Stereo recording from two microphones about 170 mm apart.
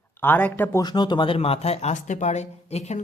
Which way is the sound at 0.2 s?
10° left (ahead or behind).